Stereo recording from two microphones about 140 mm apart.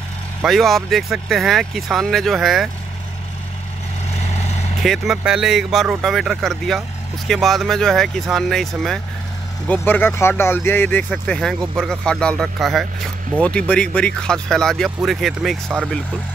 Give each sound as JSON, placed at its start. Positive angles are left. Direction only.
{"t": 0.4, "sound": "speech", "side_deg": 0}
{"t": 4.1, "sound": "vehicle", "side_deg": 50}
{"t": 4.8, "sound": "speech", "side_deg": 0}
{"t": 9.7, "sound": "speech", "side_deg": 15}